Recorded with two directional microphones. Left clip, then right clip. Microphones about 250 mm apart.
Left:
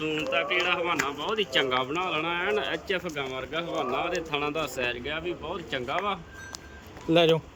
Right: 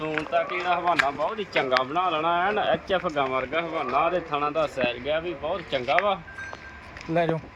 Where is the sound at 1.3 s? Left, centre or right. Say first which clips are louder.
Right 1 dB; centre.